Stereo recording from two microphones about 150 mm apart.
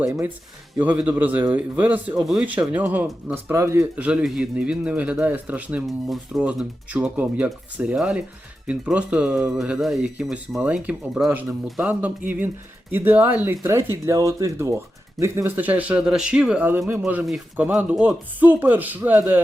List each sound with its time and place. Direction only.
0.0 s speech: 15° right (ahead or behind)
4.0 s speech: 5° right (ahead or behind)